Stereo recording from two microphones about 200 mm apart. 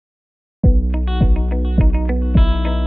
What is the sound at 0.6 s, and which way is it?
Music, centre (ahead or behind).